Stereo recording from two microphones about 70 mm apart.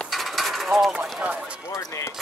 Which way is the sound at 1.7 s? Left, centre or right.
Left.